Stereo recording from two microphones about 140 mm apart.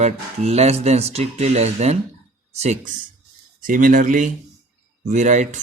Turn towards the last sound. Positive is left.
turn(degrees=-60)  # may be behind; listen again after turning